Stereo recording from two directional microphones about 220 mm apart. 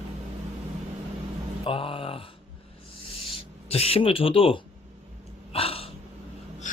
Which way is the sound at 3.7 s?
25° left (ahead or behind).